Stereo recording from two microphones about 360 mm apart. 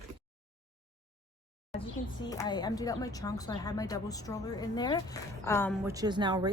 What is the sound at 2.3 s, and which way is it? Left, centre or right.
A woman's voice, centre.